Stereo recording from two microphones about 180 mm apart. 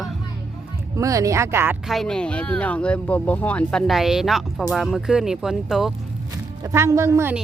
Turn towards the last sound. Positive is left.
turn(degrees=-15)  # may be behind; listen again after turning